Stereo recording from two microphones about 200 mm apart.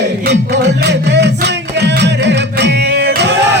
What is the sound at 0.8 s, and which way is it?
Music, 60° right (ahead or behind).